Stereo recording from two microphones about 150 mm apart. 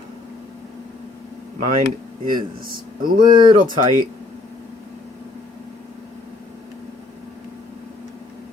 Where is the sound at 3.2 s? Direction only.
30° right (ahead or behind).